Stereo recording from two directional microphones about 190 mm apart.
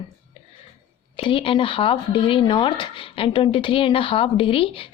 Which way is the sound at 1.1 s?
25° left (ahead or behind).